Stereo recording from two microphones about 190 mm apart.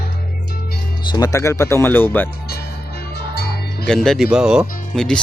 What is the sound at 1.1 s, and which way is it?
Speech, 20° left (ahead or behind).